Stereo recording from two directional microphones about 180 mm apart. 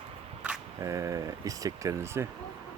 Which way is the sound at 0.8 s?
20° right (ahead or behind).